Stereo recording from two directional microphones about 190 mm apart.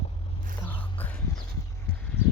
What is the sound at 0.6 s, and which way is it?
Music, 10° left (ahead or behind).